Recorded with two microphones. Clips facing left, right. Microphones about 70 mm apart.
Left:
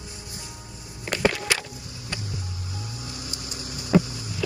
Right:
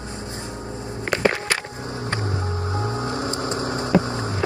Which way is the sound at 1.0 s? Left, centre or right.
Right.